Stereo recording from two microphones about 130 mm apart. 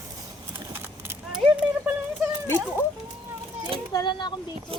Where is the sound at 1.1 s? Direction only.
10° right (ahead or behind).